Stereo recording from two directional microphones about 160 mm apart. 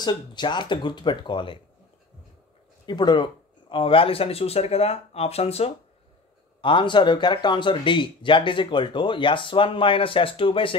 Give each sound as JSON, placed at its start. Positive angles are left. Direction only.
{"t": 0.0, "sound": "speech", "side_deg": 25}
{"t": 2.9, "sound": "speech", "side_deg": 30}